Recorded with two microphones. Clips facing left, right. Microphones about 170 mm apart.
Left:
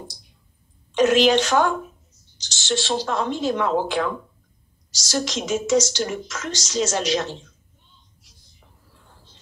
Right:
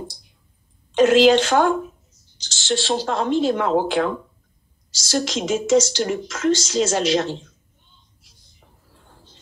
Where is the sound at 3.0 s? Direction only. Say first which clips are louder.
Right 4 dB; 30° right (ahead or behind).